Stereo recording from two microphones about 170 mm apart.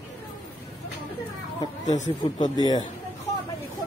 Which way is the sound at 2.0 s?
45° left (ahead or behind).